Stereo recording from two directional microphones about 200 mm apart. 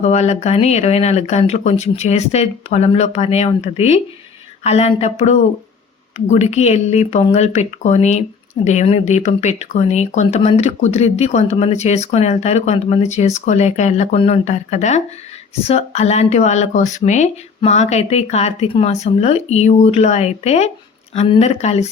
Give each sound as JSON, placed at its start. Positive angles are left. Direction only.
{"t": 0.0, "sound": "speech", "side_deg": 35}